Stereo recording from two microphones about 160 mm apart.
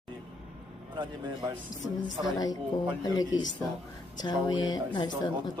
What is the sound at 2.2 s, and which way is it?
Speech, 25° left (ahead or behind).